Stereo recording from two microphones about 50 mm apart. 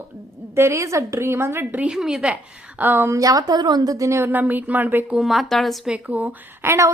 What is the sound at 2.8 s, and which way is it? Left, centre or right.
Speech, right.